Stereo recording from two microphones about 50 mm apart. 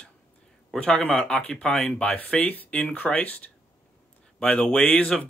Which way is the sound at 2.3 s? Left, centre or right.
Left.